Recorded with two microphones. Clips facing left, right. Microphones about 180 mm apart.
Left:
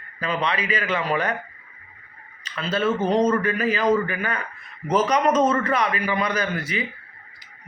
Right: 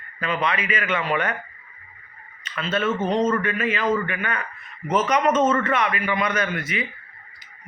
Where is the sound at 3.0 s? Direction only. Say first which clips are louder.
Left 3 dB; 35° left (ahead or behind).